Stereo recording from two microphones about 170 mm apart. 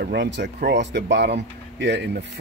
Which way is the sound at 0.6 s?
90° right.